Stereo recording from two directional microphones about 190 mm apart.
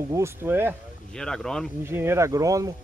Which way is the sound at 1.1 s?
5° left (ahead or behind).